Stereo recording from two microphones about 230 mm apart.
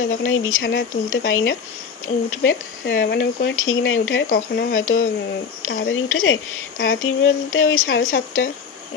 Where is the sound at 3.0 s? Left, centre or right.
Left.